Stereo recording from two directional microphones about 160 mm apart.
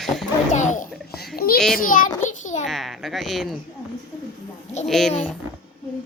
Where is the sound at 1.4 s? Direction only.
70° left (ahead or behind).